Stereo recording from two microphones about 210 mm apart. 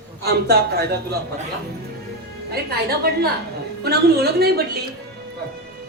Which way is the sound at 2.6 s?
50° right (ahead or behind).